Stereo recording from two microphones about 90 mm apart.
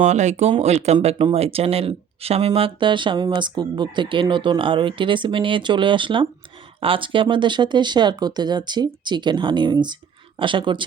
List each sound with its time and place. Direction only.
0.5 s speech: 80° right; by 6.2 s 65° right (ahead or behind)
6.7 s speech: 80° right; by 10.8 s 65° right (ahead or behind)